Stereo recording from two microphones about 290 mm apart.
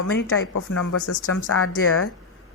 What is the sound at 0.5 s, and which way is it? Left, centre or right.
A woman's voice, left.